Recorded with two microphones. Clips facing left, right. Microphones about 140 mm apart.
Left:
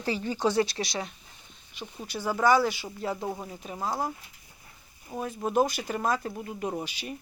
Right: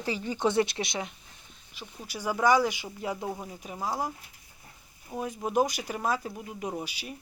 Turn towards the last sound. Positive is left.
turn(degrees=-10)  # may be behind; listen again after turning